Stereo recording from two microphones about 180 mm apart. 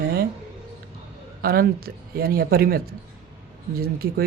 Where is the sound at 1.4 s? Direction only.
55° right (ahead or behind).